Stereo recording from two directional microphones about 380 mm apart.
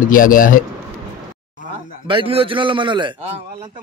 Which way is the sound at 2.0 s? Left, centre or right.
Centre.